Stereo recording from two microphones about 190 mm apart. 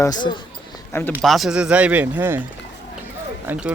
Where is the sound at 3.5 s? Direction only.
5° right (ahead or behind).